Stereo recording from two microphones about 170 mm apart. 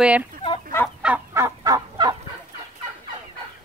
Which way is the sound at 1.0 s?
5° right (ahead or behind).